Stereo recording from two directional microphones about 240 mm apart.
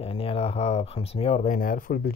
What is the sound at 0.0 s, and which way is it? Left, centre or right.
Speech, left.